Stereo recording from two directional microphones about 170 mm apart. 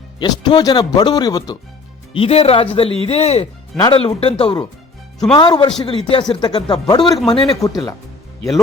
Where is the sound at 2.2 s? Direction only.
35° left (ahead or behind).